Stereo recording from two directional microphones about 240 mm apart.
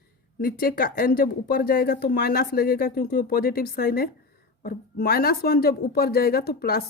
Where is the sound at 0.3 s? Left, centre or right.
Left.